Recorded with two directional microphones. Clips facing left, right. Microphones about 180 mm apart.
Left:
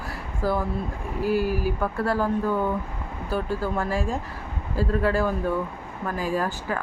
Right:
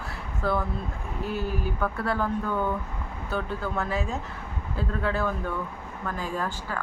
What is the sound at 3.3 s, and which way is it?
Speech, 5° left (ahead or behind).